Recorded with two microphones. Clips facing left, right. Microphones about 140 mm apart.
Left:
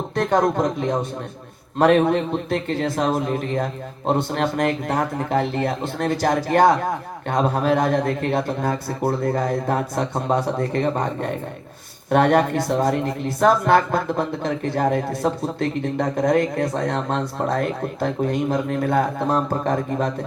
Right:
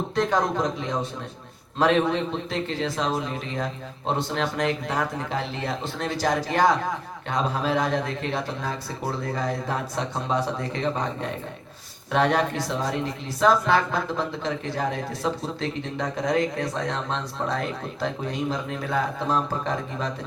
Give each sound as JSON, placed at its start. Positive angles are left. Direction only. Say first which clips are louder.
{"t": 0.2, "sound": "a man's voice", "louder": "left 5 dB", "side_deg": 50}